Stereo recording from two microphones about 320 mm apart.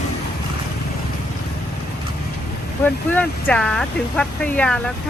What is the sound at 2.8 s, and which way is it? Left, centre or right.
Speech, centre.